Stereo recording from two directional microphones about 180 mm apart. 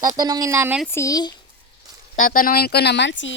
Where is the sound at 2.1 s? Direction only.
50° left (ahead or behind); by 3.3 s 90° left.